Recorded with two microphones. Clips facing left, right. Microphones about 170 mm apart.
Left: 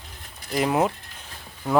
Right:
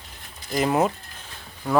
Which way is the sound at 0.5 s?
5° left (ahead or behind).